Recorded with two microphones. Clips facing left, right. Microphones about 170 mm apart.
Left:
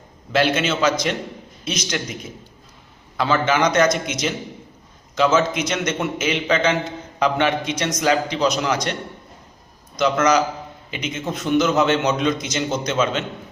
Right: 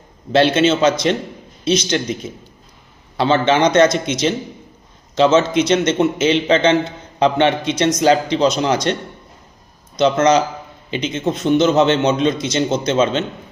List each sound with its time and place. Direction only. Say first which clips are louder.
0.3 s a man's voice: right 6 dB; 30° right (ahead or behind)
3.2 s a man's voice: right 4 dB; 30° right (ahead or behind)
10.0 s a man's voice: right 4 dB; 25° right (ahead or behind)